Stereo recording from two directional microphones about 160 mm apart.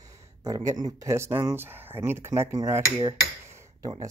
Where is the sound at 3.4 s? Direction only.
20° right (ahead or behind).